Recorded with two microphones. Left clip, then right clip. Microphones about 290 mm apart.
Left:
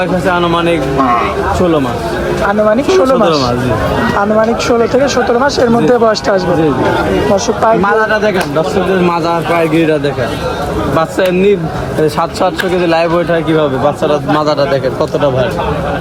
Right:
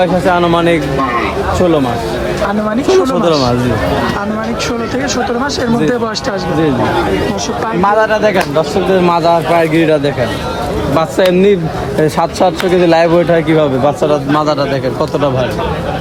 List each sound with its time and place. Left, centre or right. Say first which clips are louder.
0.0 s speech: right 1 dB; right
2.6 s speech: left 2 dB; centre
5.1 s speech: left 5 dB; centre
7.9 s speech: even; right